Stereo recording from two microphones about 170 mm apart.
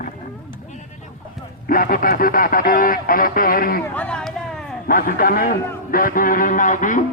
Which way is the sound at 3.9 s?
5° left (ahead or behind).